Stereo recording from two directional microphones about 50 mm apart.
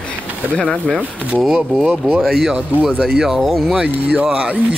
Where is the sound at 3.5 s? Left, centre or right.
Centre.